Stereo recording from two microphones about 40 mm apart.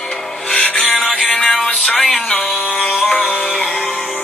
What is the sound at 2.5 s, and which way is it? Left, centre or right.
Music, centre.